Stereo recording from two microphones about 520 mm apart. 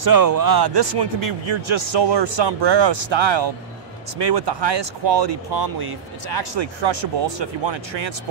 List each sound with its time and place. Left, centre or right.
0.0 s speech: right